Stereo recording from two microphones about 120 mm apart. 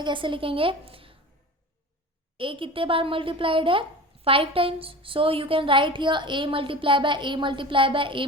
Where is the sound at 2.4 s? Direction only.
45° right (ahead or behind).